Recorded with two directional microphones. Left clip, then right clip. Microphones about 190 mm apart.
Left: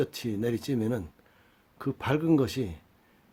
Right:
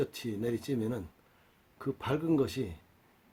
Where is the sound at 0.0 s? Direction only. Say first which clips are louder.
Left 4 dB; 40° left (ahead or behind).